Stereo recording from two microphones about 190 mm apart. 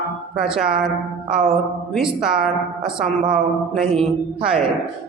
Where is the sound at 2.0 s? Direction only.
5° right (ahead or behind).